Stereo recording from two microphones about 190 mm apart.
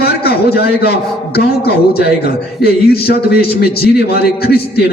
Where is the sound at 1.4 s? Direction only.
55° left (ahead or behind).